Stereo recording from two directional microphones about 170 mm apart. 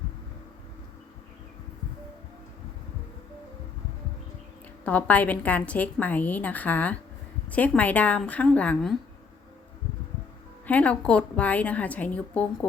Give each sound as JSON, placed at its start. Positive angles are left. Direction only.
{"t": 4.9, "sound": "a woman's voice", "side_deg": 10}
{"t": 10.7, "sound": "a woman's voice", "side_deg": 10}